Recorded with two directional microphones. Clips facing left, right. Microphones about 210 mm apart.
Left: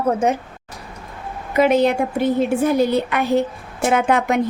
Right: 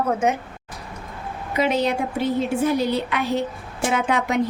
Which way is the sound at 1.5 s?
50° left (ahead or behind).